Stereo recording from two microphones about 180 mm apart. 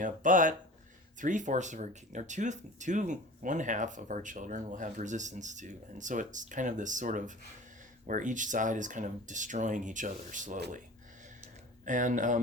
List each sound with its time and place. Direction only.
0.0 s speech: 45° right (ahead or behind)
11.9 s speech: 45° right (ahead or behind)